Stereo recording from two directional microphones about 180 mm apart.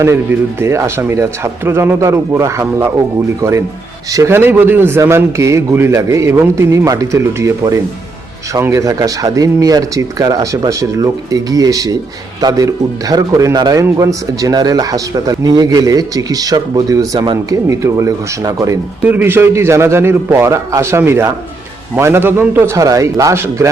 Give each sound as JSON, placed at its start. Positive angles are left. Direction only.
{"t": 0.0, "sound": "a man's voice", "side_deg": -15}